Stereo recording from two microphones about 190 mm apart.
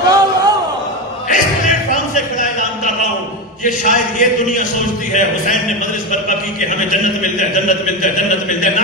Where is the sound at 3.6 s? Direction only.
40° left (ahead or behind).